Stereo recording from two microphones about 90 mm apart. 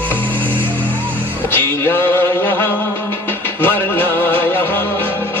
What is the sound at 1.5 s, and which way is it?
Music, 25° left (ahead or behind).